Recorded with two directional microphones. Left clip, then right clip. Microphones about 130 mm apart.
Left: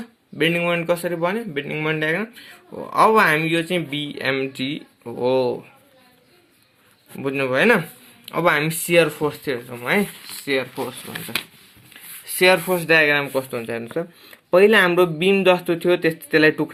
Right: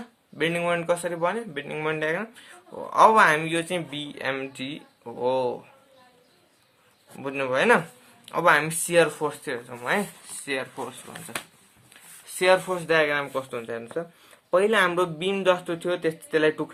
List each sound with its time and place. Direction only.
0.3 s speech: 20° left (ahead or behind)
7.2 s speech: 30° left (ahead or behind)
11.1 s speech: 50° left (ahead or behind)
12.4 s speech: 30° left (ahead or behind)